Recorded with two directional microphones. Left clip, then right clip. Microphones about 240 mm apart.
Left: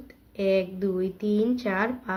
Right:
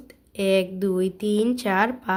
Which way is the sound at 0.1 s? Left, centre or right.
Right.